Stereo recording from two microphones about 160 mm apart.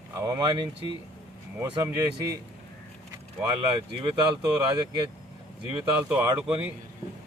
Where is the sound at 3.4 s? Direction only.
30° right (ahead or behind).